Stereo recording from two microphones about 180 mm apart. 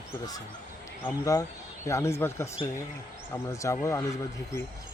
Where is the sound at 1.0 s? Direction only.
20° left (ahead or behind).